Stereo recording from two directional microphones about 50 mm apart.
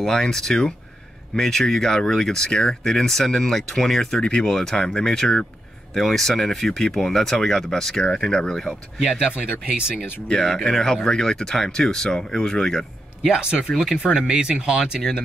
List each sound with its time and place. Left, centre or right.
0.0 s speech: centre
4.2 s speech: centre
9.0 s speech: centre
9.3 s speech: right
10.6 s speech: centre
13.4 s speech: centre